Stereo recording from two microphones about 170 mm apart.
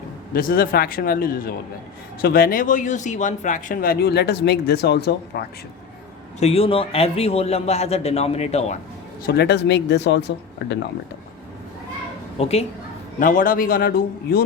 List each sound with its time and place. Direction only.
0.3 s speech: 55° left (ahead or behind)
6.4 s a man's voice: 35° left (ahead or behind)
9.2 s speech: 70° left (ahead or behind); by 10.8 s 90° left
12.4 s a man's voice: 35° left (ahead or behind)
13.1 s speech: 55° left (ahead or behind)